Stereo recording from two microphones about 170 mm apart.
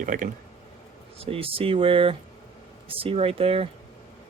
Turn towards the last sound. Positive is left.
turn(degrees=-35)  # may be behind; listen again after turning